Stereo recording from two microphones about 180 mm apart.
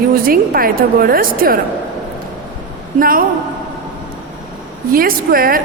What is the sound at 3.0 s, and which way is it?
Speech, 50° right (ahead or behind).